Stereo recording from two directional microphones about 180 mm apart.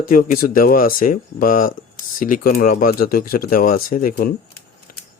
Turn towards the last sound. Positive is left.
turn(degrees=55)  # may be behind; listen again after turning